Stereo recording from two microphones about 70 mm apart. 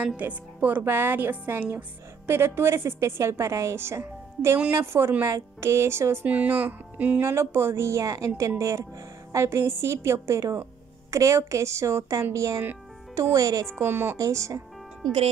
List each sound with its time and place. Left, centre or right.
0.2 s speech: right
6.2 s speech: right
7.2 s a woman's voice: right
13.7 s speech: right
14.1 s speech: right